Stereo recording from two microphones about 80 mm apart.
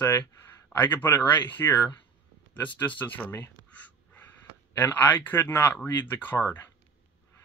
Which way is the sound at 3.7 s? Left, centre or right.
Centre.